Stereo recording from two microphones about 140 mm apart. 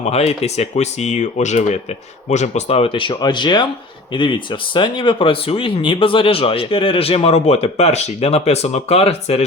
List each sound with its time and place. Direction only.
0.0 s speech: 50° left (ahead or behind)